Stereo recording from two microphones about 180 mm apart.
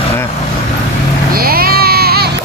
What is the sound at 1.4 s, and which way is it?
Music, 55° right (ahead or behind).